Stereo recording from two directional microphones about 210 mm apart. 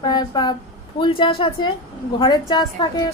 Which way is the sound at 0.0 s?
20° left (ahead or behind).